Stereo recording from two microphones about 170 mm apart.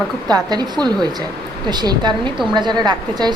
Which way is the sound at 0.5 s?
25° right (ahead or behind).